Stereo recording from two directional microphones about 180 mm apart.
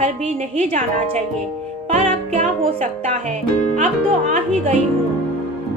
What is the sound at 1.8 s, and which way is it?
Music, 35° right (ahead or behind).